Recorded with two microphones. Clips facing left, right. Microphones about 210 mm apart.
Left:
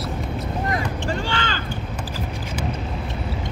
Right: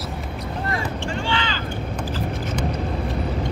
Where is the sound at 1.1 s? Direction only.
45° left (ahead or behind).